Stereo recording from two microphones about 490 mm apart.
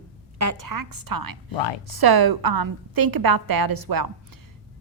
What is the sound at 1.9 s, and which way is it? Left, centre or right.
A woman's voice, right.